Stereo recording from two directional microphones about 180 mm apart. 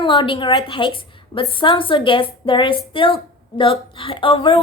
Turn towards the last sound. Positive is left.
turn(degrees=30)  # may be behind; listen again after turning